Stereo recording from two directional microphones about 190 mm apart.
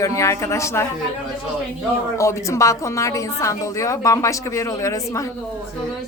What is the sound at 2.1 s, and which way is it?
A woman's voice, 15° left (ahead or behind).